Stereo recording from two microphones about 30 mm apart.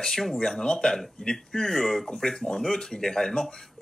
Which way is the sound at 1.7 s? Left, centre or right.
Centre.